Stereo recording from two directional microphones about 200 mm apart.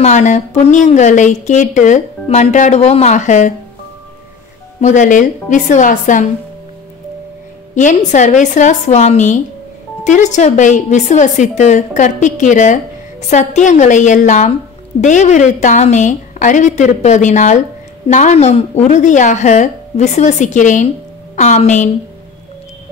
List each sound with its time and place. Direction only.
0.0 s speech: 35° left (ahead or behind)
4.7 s speech: 35° left (ahead or behind)
7.7 s speech: 40° left (ahead or behind)